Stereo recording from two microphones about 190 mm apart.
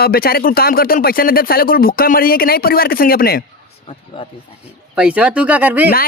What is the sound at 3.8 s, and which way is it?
Speech, 30° left (ahead or behind).